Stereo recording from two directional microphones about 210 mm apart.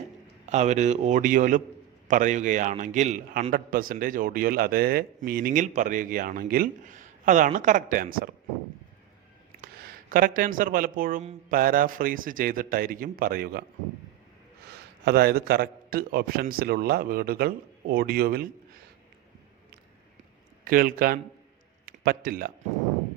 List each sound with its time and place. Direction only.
0.5 s a man's voice: 35° right (ahead or behind)
9.6 s a man's voice: 45° right (ahead or behind)
15.0 s a man's voice: 45° right (ahead or behind)
20.7 s a man's voice: 45° right (ahead or behind)